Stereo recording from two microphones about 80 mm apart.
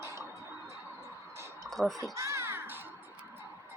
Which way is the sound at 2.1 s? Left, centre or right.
Right.